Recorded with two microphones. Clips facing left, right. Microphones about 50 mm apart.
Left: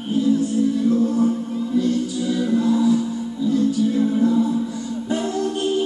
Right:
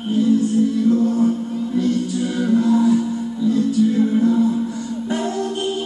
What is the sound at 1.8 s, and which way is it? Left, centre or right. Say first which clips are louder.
Music: right 1 dB; right.